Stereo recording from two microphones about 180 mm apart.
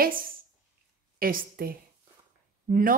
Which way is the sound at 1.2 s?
55° right (ahead or behind).